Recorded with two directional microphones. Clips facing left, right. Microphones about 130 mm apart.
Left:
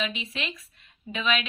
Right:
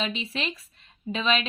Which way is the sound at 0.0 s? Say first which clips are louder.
Right 2 dB; 35° right (ahead or behind).